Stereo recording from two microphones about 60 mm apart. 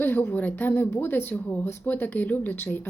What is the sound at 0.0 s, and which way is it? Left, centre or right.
Speech, left.